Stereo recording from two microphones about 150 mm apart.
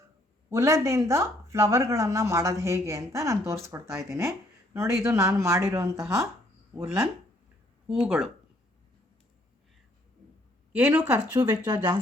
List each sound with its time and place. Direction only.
0.5 s speech: 20° right (ahead or behind)
7.9 s speech: 10° right (ahead or behind)
10.7 s speech: 10° right (ahead or behind)
11.4 s speech: 25° right (ahead or behind)